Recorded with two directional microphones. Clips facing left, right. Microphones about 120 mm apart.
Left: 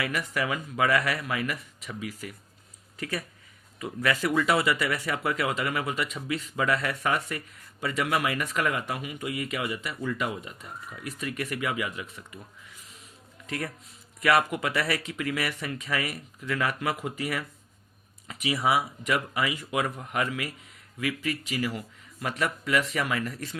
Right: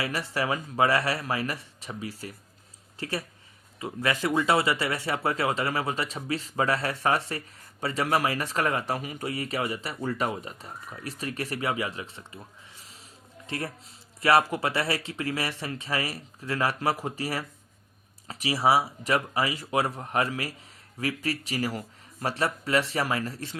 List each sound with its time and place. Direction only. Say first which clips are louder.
0.0 s speech: even; 30° right (ahead or behind)
14.2 s speech: right 2 dB; 30° right (ahead or behind)